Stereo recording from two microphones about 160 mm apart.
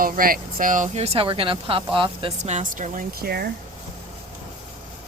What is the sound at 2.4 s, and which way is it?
Speech, 45° right (ahead or behind).